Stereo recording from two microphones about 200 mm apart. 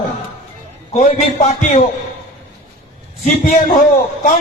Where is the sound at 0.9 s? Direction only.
30° left (ahead or behind).